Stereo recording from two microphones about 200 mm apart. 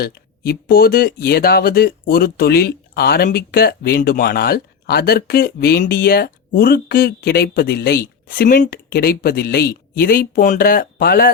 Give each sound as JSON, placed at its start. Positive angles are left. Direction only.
{"t": 0.0, "sound": "speech", "side_deg": 50}